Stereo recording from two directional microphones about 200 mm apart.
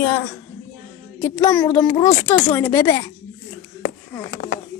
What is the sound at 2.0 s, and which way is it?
Speech, 35° left (ahead or behind).